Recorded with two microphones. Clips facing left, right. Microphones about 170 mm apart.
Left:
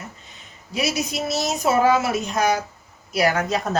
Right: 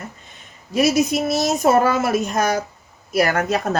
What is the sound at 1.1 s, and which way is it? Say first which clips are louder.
Speech: right 5 dB; 50° right (ahead or behind).